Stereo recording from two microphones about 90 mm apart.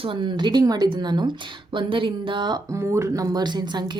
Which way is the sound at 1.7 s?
70° right (ahead or behind).